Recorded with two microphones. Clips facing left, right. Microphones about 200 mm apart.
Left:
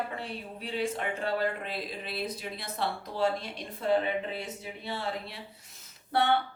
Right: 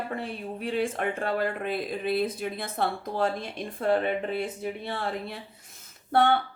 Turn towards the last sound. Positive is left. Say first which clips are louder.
# right 4 dB
turn(degrees=-50)  # may be behind; listen again after turning